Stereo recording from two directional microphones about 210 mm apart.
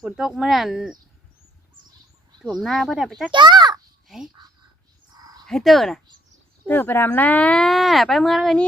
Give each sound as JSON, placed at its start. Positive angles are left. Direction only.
{"t": 0.0, "sound": "speech", "side_deg": 0}
{"t": 2.4, "sound": "speech", "side_deg": 0}
{"t": 3.3, "sound": "a child's voice", "side_deg": -20}
{"t": 5.1, "sound": "a sound", "side_deg": -20}
{"t": 5.5, "sound": "speech", "side_deg": 0}